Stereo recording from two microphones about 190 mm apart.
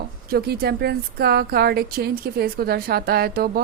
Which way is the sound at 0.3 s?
55° right (ahead or behind).